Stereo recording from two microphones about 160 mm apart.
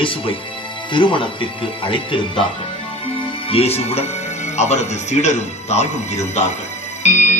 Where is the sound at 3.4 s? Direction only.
40° left (ahead or behind).